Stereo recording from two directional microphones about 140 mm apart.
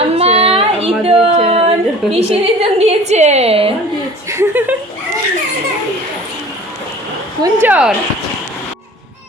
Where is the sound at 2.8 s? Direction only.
55° right (ahead or behind).